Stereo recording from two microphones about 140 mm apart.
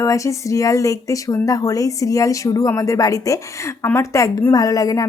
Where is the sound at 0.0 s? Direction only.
20° left (ahead or behind).